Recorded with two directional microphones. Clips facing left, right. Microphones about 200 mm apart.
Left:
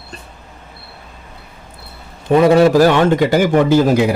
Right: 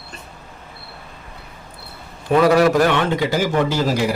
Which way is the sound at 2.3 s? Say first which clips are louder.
Left 4 dB; 25° left (ahead or behind).